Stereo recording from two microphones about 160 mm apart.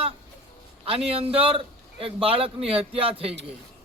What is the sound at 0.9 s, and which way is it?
A man's voice, 40° right (ahead or behind).